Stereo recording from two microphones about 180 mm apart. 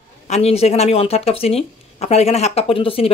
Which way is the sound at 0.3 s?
35° left (ahead or behind).